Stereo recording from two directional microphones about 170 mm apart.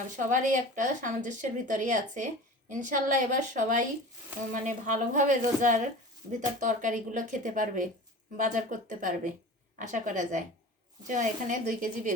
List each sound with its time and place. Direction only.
0.2 s a woman's voice: 50° right (ahead or behind)